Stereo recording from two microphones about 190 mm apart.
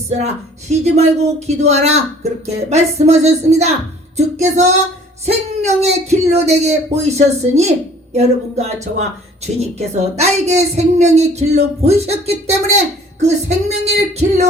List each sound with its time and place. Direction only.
0.7 s a woman's voice: 35° right (ahead or behind)